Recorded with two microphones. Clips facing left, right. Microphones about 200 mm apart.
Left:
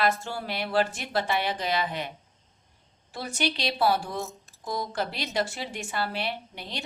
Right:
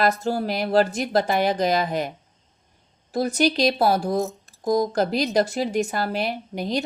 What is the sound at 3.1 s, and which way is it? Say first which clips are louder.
A woman's voice: right 10 dB; 40° right (ahead or behind).